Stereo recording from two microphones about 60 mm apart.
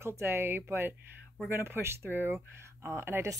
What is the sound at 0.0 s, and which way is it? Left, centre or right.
Speech, right.